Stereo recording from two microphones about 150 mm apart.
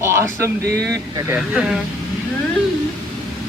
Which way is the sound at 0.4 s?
20° right (ahead or behind).